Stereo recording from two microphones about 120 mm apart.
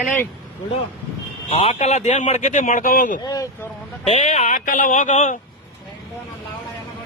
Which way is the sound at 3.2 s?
30° left (ahead or behind).